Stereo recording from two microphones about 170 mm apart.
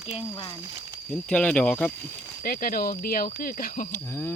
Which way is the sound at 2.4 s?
60° left (ahead or behind).